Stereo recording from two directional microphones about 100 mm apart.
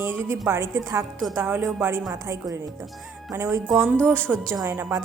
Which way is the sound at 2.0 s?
35° right (ahead or behind).